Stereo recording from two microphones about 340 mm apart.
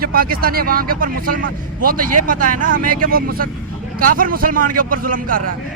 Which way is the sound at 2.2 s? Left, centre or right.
Right.